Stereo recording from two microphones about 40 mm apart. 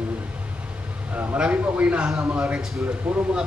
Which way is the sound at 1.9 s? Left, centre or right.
Right.